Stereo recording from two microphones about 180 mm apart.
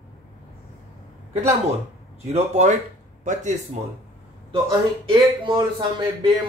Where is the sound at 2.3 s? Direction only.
40° right (ahead or behind).